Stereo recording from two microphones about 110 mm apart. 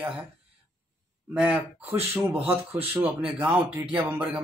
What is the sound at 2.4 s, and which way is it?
Speech, 25° right (ahead or behind).